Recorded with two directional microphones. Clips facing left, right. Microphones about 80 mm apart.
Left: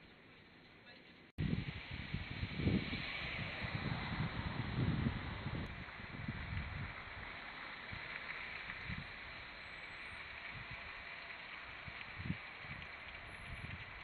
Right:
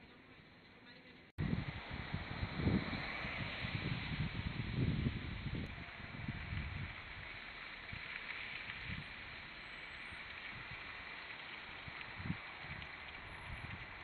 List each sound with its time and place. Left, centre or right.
2.5 s vehicle: right
3.2 s waves: centre
3.6 s a sound: left